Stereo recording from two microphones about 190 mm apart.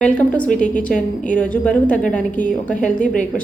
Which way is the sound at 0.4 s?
40° left (ahead or behind).